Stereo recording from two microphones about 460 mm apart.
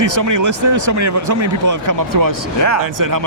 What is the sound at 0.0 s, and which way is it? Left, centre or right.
Speech, right.